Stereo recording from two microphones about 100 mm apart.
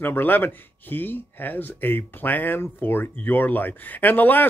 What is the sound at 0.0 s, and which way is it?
Speech, 20° left (ahead or behind).